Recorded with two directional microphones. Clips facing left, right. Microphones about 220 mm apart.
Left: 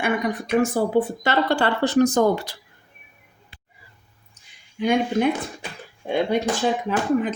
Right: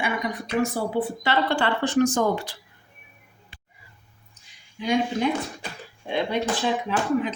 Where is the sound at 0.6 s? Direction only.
45° left (ahead or behind).